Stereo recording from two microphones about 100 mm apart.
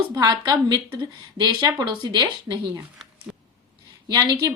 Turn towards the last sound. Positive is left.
turn(degrees=-40)  # may be behind; listen again after turning